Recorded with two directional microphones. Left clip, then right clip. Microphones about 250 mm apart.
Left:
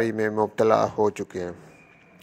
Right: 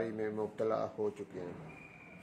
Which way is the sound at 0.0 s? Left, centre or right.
Left.